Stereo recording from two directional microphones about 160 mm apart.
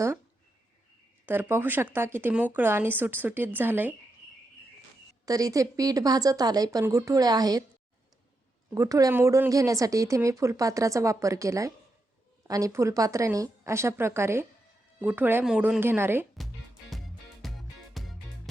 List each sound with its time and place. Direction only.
1.2 s speech: 10° right (ahead or behind)
5.2 s speech: 20° right (ahead or behind)
8.7 s speech: 20° right (ahead or behind)
17.4 s music: centre (ahead or behind)